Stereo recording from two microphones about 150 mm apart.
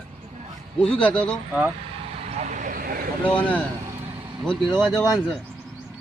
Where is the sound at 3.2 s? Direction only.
10° left (ahead or behind).